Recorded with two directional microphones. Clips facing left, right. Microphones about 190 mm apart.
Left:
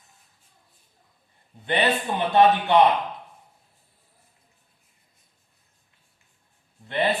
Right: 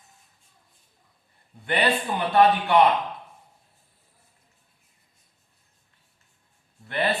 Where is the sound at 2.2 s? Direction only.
20° left (ahead or behind).